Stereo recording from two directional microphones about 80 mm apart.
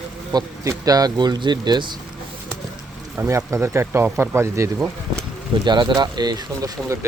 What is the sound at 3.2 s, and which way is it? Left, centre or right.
Speech, right.